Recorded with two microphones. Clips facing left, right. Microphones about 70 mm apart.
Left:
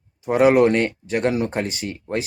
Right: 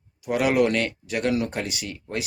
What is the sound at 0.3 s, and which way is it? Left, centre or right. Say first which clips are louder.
Speech: left 6 dB; left.